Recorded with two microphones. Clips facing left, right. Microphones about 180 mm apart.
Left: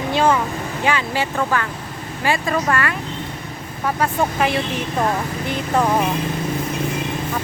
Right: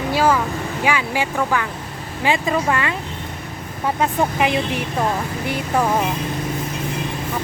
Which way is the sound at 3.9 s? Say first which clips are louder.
Even; 15° right (ahead or behind).